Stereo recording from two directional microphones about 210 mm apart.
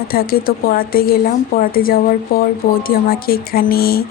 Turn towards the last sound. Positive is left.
turn(degrees=45)  # may be behind; listen again after turning